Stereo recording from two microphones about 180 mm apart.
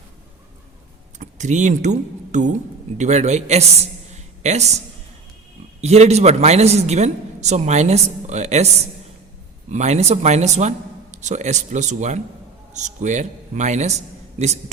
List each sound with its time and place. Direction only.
1.2 s a man's voice: 40° right (ahead or behind)
5.8 s a man's voice: 35° right (ahead or behind)